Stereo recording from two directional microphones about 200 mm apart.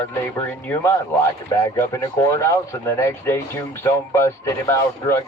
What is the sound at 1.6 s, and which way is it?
Speech, 15° left (ahead or behind).